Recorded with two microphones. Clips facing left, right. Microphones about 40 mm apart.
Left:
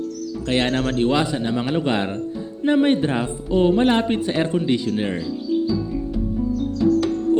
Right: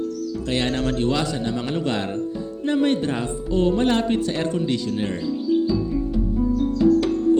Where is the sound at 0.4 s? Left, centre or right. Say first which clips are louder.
Left 3 dB; left.